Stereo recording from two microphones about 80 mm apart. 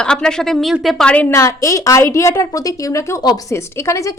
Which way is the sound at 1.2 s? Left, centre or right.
Left.